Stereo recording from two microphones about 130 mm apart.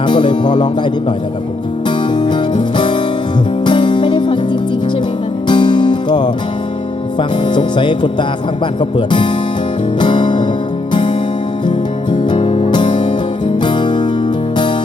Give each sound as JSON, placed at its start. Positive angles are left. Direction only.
{"t": 0.1, "sound": "speech", "side_deg": 35}
{"t": 2.1, "sound": "music", "side_deg": 35}
{"t": 5.5, "sound": "music", "side_deg": 35}
{"t": 7.2, "sound": "speech", "side_deg": 35}
{"t": 10.0, "sound": "music", "side_deg": 35}
{"t": 12.1, "sound": "music", "side_deg": 40}